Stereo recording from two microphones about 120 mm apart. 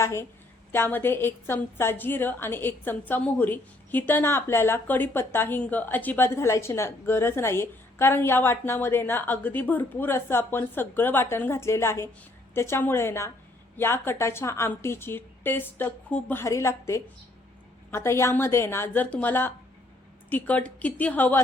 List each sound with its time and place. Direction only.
0.0 s a woman's voice: 25° left (ahead or behind)
16.4 s a woman's voice: 25° left (ahead or behind)